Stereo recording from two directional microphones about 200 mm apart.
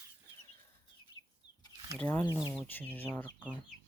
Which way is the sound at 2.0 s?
10° left (ahead or behind).